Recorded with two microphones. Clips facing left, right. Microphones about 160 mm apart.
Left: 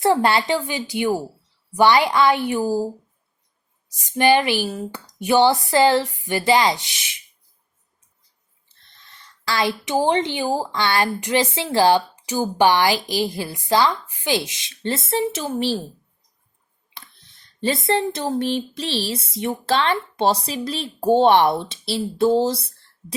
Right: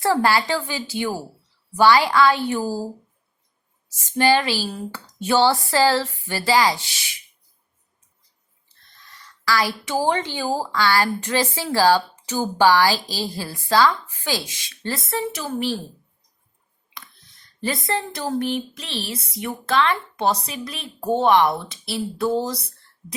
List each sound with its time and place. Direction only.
0.0 s a woman's voice: 20° left (ahead or behind)
9.4 s speech: 25° left (ahead or behind)
17.6 s speech: 25° left (ahead or behind)